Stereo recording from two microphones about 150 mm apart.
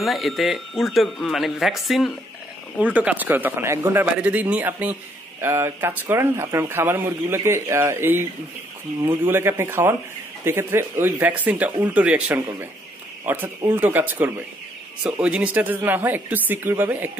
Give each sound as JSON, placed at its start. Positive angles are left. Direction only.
{"t": 0.0, "sound": "speech", "side_deg": 0}